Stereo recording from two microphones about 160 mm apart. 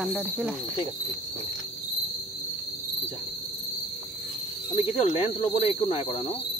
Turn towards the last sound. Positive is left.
turn(degrees=35)  # may be behind; listen again after turning